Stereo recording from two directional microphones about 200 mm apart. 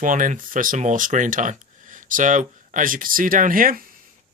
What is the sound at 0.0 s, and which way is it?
Speech, 40° right (ahead or behind).